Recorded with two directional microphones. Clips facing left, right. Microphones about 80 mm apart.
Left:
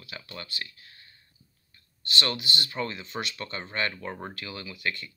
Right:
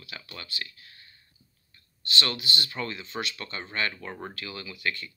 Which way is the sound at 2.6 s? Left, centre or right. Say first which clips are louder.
Left 1 dB; centre.